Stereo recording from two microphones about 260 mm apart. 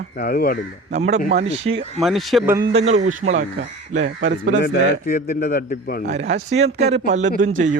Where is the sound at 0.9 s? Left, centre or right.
Right.